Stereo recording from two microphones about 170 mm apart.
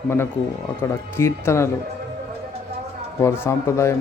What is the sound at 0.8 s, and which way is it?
Speech, 15° left (ahead or behind).